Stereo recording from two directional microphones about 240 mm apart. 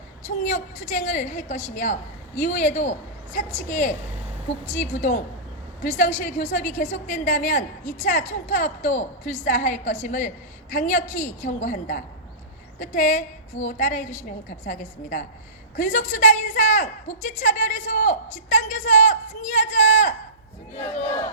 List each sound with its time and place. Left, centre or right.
0.2 s a woman's voice: left